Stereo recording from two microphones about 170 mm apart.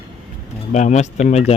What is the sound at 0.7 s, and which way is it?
Speech, 45° left (ahead or behind).